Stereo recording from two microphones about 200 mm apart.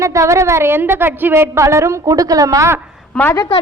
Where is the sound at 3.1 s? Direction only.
15° left (ahead or behind).